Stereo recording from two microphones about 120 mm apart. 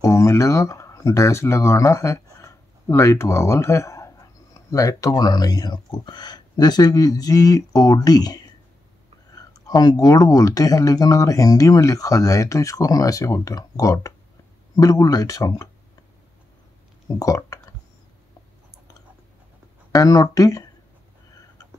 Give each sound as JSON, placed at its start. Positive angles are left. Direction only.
{"t": 0.0, "sound": "speech", "side_deg": 25}
{"t": 17.1, "sound": "speech", "side_deg": 30}
{"t": 19.9, "sound": "speech", "side_deg": 30}